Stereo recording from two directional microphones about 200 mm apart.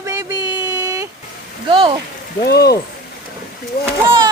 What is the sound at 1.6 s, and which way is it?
Speech, 25° right (ahead or behind).